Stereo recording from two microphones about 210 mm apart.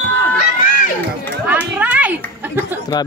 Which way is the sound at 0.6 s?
40° left (ahead or behind).